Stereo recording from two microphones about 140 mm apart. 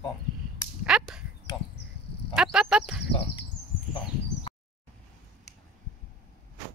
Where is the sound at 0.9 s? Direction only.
5° right (ahead or behind).